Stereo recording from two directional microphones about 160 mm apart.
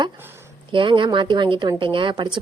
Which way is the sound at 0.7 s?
30° right (ahead or behind).